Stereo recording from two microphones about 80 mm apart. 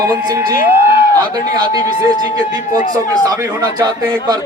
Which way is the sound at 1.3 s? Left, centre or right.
Right.